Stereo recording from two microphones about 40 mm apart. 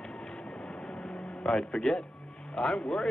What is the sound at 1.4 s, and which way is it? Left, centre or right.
A man's voice, centre.